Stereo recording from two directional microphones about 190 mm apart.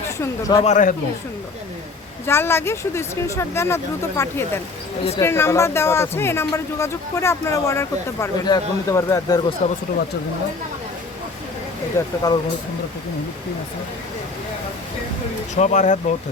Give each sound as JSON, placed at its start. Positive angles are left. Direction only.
{"t": 0.2, "sound": "speech", "side_deg": 20}
{"t": 0.6, "sound": "speech", "side_deg": 40}
{"t": 2.2, "sound": "speech", "side_deg": 15}
{"t": 9.6, "sound": "speech", "side_deg": 35}
{"t": 11.9, "sound": "speech", "side_deg": 20}
{"t": 15.5, "sound": "speech", "side_deg": 40}